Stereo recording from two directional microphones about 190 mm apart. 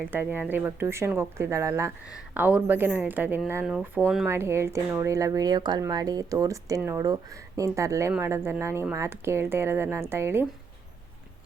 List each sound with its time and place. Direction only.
0.1 s speech: 10° right (ahead or behind)